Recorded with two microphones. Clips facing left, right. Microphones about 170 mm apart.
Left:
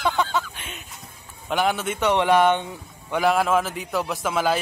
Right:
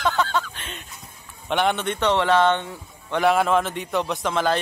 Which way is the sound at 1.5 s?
5° left (ahead or behind).